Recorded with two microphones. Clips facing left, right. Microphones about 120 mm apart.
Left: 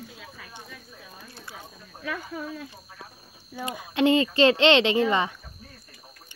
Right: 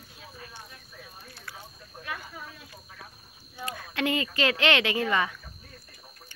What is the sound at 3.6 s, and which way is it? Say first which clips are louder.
Speech: left 8 dB; 20° left (ahead or behind).